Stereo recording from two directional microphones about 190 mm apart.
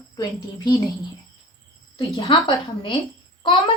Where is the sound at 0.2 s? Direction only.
20° left (ahead or behind).